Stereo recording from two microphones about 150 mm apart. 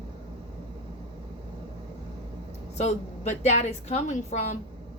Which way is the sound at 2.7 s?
45° left (ahead or behind).